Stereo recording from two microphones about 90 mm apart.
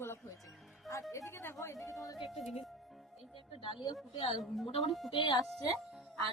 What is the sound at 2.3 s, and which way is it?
Speech, centre (ahead or behind).